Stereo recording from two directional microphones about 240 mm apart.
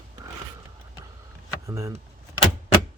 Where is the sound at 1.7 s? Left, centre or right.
Centre.